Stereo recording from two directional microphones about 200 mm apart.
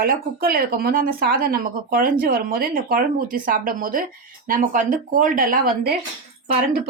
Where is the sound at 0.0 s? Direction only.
50° right (ahead or behind).